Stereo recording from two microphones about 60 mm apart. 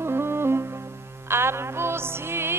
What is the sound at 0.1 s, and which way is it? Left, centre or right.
Music, right.